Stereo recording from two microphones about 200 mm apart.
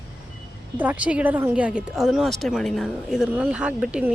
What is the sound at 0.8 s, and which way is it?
Speech, 5° right (ahead or behind).